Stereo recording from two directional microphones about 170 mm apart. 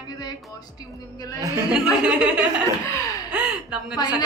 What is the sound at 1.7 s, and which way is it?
Speech, 5° right (ahead or behind).